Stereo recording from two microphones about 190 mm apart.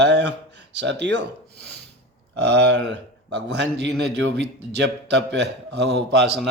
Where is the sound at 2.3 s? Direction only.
65° right (ahead or behind).